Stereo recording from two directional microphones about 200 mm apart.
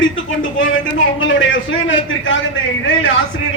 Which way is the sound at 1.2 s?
70° left (ahead or behind).